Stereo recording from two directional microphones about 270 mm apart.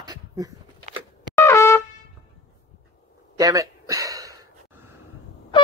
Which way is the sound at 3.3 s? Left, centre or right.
Centre.